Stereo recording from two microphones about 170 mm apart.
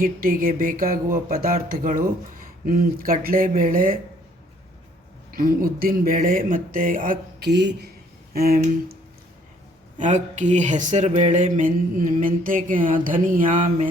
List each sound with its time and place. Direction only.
0.0 s speech: 55° right (ahead or behind)
5.3 s speech: 60° right (ahead or behind)
10.0 s speech: 45° right (ahead or behind)